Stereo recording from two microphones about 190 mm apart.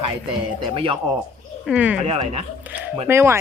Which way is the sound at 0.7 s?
30° right (ahead or behind).